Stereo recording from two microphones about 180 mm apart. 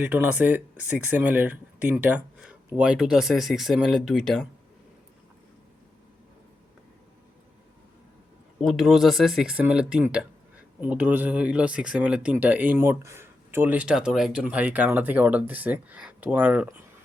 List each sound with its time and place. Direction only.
0.0 s speech: 10° right (ahead or behind)
8.6 s speech: centre (ahead or behind)